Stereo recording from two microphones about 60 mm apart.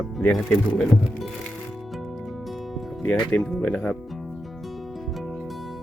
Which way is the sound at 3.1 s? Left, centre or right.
Centre.